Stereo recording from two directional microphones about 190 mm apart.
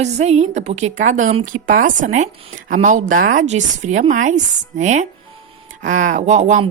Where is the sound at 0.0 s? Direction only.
35° right (ahead or behind).